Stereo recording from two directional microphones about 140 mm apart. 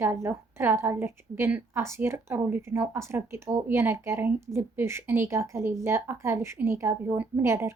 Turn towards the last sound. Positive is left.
turn(degrees=-20)  # may be behind; listen again after turning